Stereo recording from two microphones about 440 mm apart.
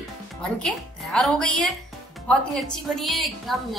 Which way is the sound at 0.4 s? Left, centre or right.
Centre.